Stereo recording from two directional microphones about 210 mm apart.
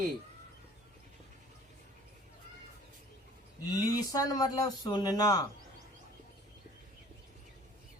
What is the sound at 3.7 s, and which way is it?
Speech, 20° left (ahead or behind).